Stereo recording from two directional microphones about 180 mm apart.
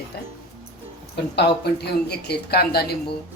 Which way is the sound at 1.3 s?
65° left (ahead or behind).